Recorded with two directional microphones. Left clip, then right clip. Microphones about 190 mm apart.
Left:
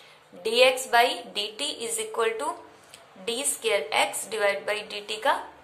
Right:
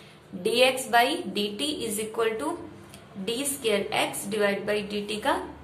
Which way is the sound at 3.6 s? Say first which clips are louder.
Left 2 dB; 25° left (ahead or behind).